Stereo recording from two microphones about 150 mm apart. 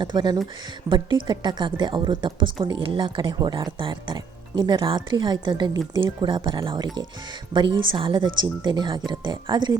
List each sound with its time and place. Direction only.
0.0 s speech: 30° right (ahead or behind)